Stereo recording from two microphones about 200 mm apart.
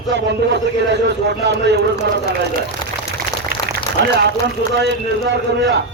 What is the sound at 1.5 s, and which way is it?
Speech, 60° right (ahead or behind).